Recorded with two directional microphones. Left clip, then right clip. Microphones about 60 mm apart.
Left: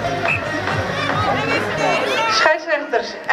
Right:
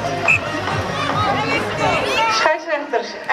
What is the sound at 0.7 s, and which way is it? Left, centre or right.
Music, left.